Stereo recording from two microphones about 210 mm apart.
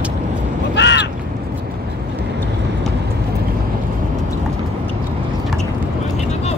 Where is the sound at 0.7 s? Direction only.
55° left (ahead or behind).